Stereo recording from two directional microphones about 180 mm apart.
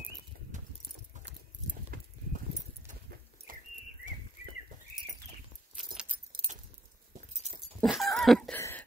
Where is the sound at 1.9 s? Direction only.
55° right (ahead or behind).